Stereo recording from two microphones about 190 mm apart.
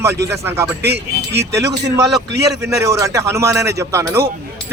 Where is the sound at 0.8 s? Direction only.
60° right (ahead or behind).